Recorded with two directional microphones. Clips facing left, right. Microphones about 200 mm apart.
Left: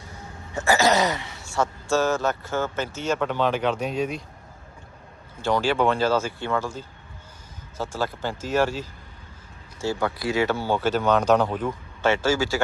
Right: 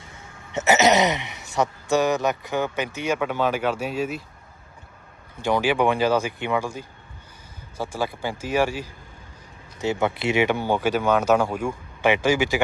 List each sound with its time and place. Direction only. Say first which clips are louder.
0.5 s speech: right 2 dB; 20° right (ahead or behind)
5.4 s speech: right 1 dB; 15° right (ahead or behind)